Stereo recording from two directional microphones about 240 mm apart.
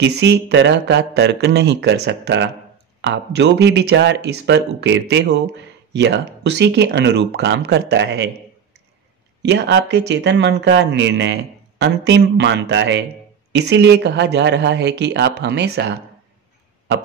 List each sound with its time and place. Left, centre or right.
0.0 s speech: right
9.4 s speech: right